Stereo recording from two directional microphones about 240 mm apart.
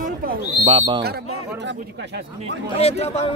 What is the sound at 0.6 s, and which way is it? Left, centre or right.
Speech, right.